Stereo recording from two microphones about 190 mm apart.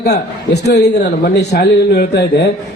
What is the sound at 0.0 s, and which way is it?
A man's voice, 60° left (ahead or behind).